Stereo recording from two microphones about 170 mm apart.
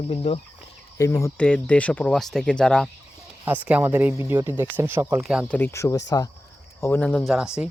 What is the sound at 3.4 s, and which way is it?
Speech, 10° right (ahead or behind).